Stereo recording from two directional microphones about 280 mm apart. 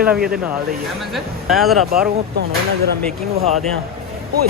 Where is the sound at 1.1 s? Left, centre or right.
Centre.